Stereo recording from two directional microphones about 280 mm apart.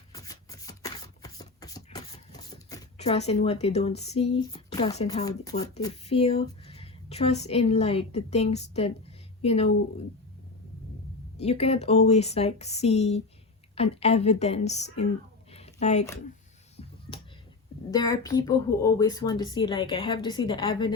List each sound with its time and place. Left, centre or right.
0.1 s shuffling cards: centre
3.0 s speech: left
11.3 s speech: left
15.5 s a sound: left
17.9 s speech: centre